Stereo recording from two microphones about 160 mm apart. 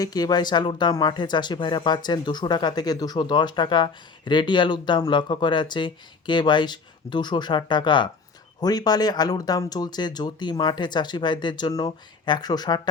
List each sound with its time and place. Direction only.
0.0 s speech: 25° left (ahead or behind)